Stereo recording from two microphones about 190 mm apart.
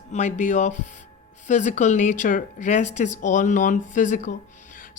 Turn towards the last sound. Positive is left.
turn(degrees=40)  # may be behind; listen again after turning